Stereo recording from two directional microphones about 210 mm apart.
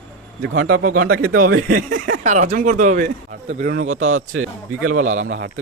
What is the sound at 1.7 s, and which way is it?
Speech, 40° right (ahead or behind).